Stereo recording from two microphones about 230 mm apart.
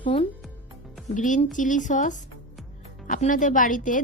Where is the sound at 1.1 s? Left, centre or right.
Left.